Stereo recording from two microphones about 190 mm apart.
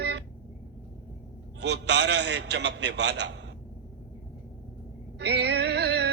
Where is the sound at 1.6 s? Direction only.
65° right (ahead or behind).